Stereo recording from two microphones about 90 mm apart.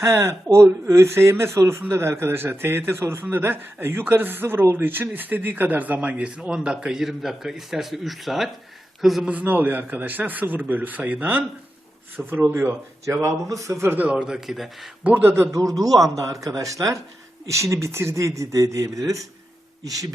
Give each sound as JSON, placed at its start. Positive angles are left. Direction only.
{"t": 0.0, "sound": "a man's voice", "side_deg": -35}
{"t": 9.3, "sound": "a man's voice", "side_deg": -20}
{"t": 14.0, "sound": "speech", "side_deg": -15}
{"t": 15.0, "sound": "a man's voice", "side_deg": -20}
{"t": 16.1, "sound": "speech", "side_deg": -40}